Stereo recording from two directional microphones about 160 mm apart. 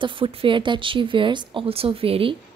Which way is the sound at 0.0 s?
35° right (ahead or behind).